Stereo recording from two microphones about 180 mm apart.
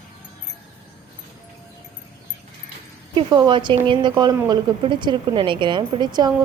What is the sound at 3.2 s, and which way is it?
A woman's voice, 25° right (ahead or behind).